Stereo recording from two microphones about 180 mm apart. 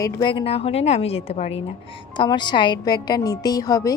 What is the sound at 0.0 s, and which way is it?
A woman's voice, 25° left (ahead or behind).